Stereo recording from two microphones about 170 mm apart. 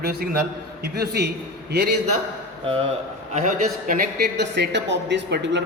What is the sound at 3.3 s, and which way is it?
Speech, 45° right (ahead or behind).